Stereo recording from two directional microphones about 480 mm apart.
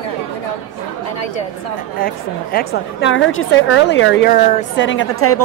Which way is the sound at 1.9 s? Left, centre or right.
Centre.